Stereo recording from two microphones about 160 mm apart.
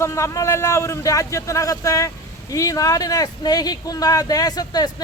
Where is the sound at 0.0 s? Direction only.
15° left (ahead or behind).